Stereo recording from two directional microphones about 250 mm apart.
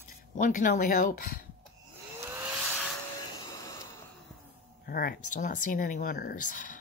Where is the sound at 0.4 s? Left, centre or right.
Left.